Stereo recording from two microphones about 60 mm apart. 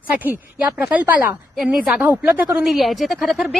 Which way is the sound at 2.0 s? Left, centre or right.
Right.